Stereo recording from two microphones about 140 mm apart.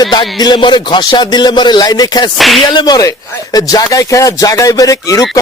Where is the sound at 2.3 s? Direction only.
Centre (ahead or behind).